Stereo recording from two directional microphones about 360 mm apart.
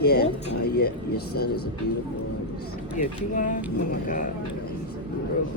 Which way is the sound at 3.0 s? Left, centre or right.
Left.